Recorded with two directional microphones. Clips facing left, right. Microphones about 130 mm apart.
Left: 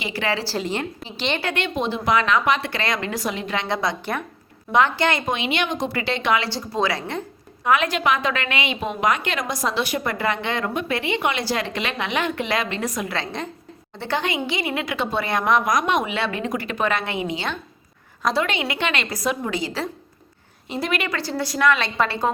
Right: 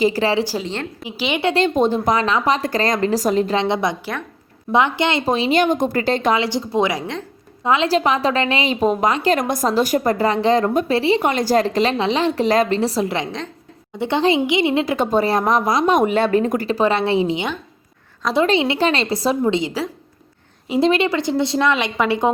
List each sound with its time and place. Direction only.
0.0 s a woman's voice: 35° right (ahead or behind)
0.3 s a woman's voice: 15° right (ahead or behind)
0.6 s a woman's voice: 10° left (ahead or behind)
1.0 s a woman's voice: 10° right (ahead or behind)
1.5 s a woman's voice: 40° right (ahead or behind)
3.6 s a woman's voice: 25° right (ahead or behind)
5.2 s a woman's voice: 35° right (ahead or behind)
6.4 s a woman's voice: 20° right (ahead or behind)
9.4 s a woman's voice: 50° right (ahead or behind); by 14.9 s 25° right (ahead or behind)
14.9 s a woman's voice: 45° right (ahead or behind)
16.0 s a woman's voice: 45° right (ahead or behind)
18.4 s a woman's voice: 30° right (ahead or behind)
20.8 s a woman's voice: 25° right (ahead or behind)